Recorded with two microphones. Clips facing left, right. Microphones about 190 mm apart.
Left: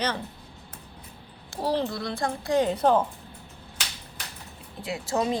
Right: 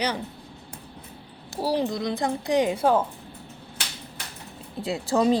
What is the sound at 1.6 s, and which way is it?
A child's voice, 10° right (ahead or behind).